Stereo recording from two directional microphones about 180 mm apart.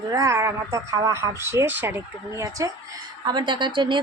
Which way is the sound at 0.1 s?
20° right (ahead or behind).